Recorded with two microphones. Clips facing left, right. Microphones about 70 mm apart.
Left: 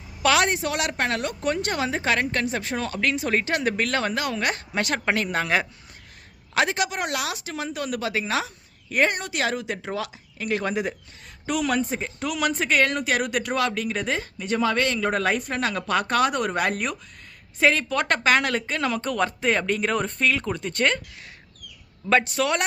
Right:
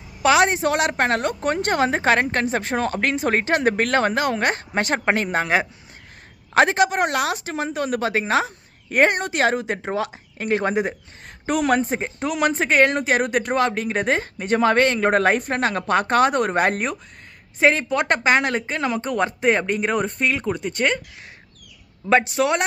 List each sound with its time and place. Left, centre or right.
0.2 s a woman's voice: right
0.6 s speech: right
6.5 s speech: right; by 21.0 s centre
22.0 s speech: right